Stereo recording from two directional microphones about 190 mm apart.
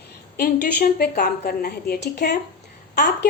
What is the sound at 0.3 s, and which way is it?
A woman's voice, 45° left (ahead or behind).